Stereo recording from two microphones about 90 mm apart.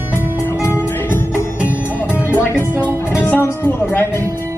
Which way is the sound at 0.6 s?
30° left (ahead or behind).